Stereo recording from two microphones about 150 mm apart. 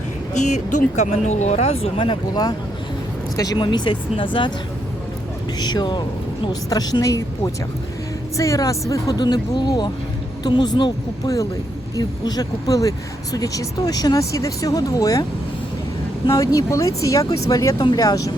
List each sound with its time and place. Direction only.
0.3 s speech: 50° left (ahead or behind); by 4.5 s 35° left (ahead or behind)
5.5 s speech: 30° left (ahead or behind)